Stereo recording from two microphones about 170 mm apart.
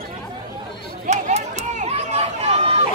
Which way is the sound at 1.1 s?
40° right (ahead or behind).